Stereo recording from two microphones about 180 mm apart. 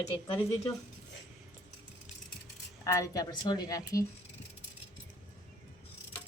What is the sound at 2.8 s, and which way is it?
Speech, 15° left (ahead or behind).